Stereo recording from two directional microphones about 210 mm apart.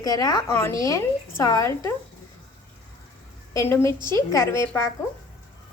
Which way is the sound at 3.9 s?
20° right (ahead or behind).